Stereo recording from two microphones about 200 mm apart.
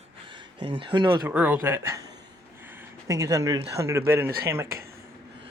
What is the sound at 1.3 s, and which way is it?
Speech, 10° right (ahead or behind).